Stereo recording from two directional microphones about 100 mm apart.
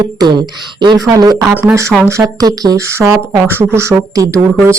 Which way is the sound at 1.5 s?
30° right (ahead or behind).